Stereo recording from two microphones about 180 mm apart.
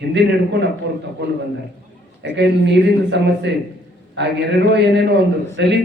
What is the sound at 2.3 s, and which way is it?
A man's voice, 75° right (ahead or behind).